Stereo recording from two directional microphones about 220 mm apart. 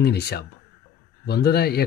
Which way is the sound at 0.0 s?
45° left (ahead or behind).